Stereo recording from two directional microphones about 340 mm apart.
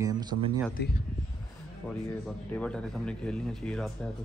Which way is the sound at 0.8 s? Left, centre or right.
Left.